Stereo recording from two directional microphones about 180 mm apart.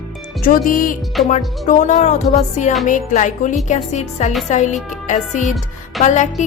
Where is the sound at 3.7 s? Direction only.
40° left (ahead or behind).